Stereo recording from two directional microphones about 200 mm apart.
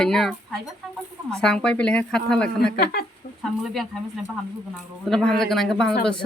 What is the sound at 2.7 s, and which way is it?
Speech, 50° left (ahead or behind).